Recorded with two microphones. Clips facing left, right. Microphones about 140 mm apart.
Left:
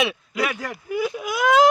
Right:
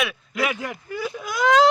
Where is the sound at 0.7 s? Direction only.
10° left (ahead or behind).